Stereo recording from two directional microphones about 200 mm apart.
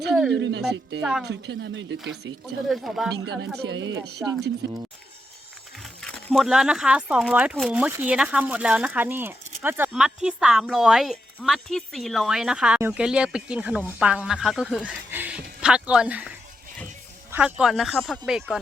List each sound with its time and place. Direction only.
0.1 s speech: centre (ahead or behind)
0.3 s speech: 60° right (ahead or behind)
2.6 s speech: centre (ahead or behind)
3.6 s speech: 60° right (ahead or behind)
5.8 s speech: centre (ahead or behind)
17.3 s speech: 5° right (ahead or behind)